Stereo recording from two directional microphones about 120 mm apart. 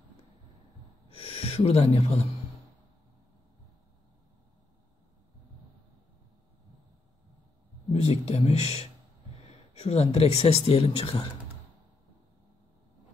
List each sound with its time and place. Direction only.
1.0 s gasp: 55° left (ahead or behind)
7.9 s speech: 60° left (ahead or behind)